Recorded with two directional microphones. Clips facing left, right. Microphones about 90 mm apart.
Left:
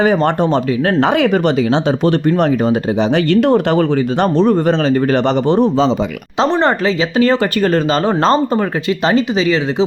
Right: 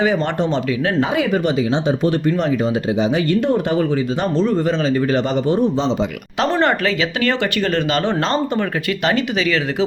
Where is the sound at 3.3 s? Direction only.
90° left; by 5.7 s 65° left (ahead or behind).